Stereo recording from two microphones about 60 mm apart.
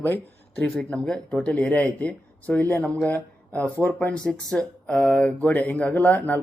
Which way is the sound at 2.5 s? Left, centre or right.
Left.